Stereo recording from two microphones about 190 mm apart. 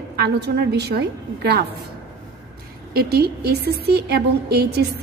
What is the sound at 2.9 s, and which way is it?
A woman's voice, 55° right (ahead or behind).